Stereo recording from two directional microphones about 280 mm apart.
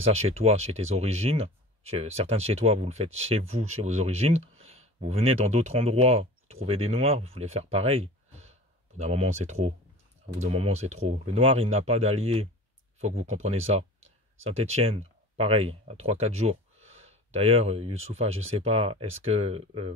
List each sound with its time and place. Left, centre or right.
0.0 s speech: right